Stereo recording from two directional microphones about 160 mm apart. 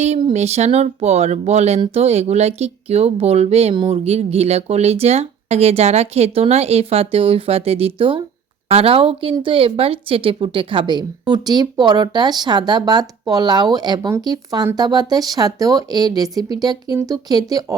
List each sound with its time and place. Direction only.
0.3 s a woman's voice: 45° right (ahead or behind); by 17.7 s 25° right (ahead or behind)